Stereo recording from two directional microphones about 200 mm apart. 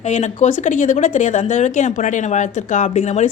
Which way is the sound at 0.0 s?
35° left (ahead or behind).